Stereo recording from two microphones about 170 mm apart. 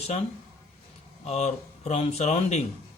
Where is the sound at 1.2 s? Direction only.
40° left (ahead or behind).